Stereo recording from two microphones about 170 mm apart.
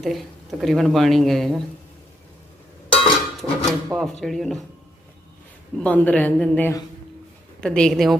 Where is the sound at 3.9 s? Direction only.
Centre (ahead or behind).